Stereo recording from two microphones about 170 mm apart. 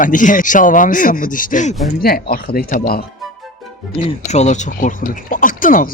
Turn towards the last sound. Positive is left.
turn(degrees=50)  # may be behind; listen again after turning